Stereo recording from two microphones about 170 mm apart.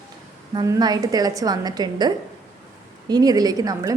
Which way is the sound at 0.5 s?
20° right (ahead or behind).